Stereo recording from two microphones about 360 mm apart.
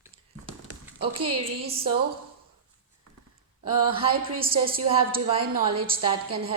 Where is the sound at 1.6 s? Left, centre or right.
Centre.